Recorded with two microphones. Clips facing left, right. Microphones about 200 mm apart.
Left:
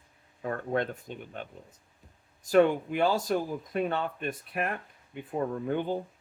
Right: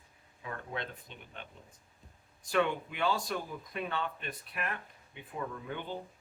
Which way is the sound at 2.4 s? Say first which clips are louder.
Left 8 dB; 40° left (ahead or behind).